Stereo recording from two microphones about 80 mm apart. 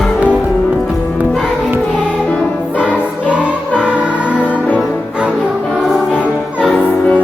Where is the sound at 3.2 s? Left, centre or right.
Centre.